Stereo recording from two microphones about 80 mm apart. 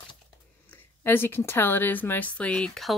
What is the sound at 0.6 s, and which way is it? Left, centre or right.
Speech, left.